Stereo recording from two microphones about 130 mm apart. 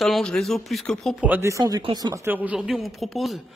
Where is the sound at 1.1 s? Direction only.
15° right (ahead or behind).